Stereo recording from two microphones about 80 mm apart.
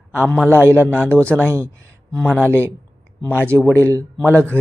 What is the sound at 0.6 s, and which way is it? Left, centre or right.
Speech, right.